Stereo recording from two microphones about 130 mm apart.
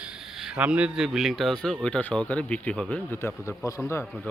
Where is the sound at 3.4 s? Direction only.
25° left (ahead or behind).